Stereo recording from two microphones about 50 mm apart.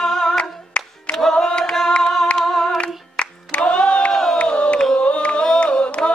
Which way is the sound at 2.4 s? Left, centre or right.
Centre.